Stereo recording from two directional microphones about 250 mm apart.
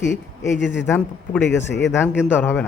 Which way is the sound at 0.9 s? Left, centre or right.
Centre.